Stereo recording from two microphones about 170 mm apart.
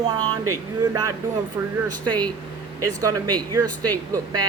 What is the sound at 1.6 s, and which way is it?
Speech, 15° right (ahead or behind).